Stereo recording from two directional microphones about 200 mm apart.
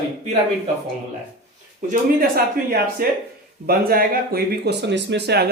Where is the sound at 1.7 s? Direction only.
45° right (ahead or behind).